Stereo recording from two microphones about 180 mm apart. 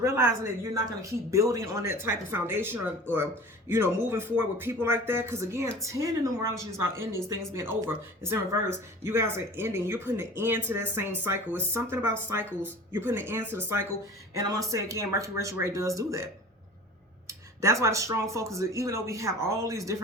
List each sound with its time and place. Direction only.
0.0 s speech: 15° right (ahead or behind)
17.2 s speech: 15° right (ahead or behind)